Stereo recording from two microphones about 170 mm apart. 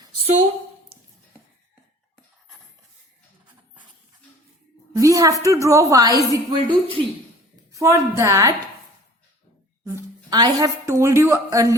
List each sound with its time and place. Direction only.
4.9 s a woman's voice: 20° right (ahead or behind)
7.7 s a woman's voice: 20° right (ahead or behind)
9.8 s a woman's voice: 20° right (ahead or behind)